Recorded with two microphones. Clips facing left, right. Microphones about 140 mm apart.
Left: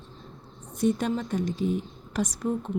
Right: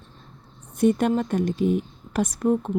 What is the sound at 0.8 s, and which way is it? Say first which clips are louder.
A woman's voice: right 5 dB; 60° right (ahead or behind).